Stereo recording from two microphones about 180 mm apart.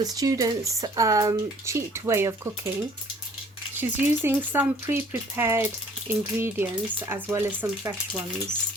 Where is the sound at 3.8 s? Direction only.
10° right (ahead or behind).